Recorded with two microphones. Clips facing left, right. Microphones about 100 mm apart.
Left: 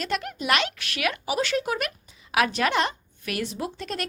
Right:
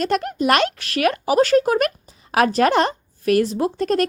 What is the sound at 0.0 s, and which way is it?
A woman's voice, 40° right (ahead or behind).